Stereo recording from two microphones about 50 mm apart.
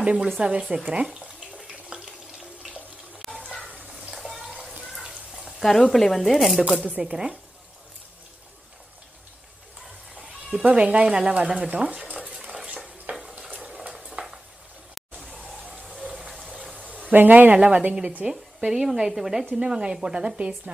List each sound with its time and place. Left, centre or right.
0.0 s speech: centre
1.9 s water tap: centre
3.3 s a sound: centre
3.6 s bathtub: right
4.1 s bathtub: centre
5.4 s speech: centre
7.0 s speech: centre
10.6 s speech: right
11.5 s stir: right
16.1 s water: centre
17.1 s speech: right
18.2 s speech: centre